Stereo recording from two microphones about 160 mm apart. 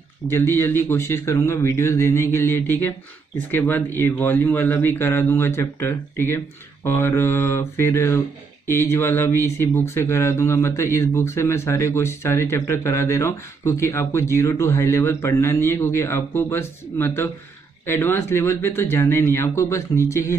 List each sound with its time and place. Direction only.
0.3 s speech: 15° left (ahead or behind)